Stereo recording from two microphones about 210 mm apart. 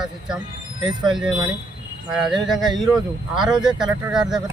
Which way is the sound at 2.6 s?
Centre (ahead or behind).